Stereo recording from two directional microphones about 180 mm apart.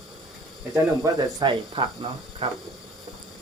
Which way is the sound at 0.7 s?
20° right (ahead or behind).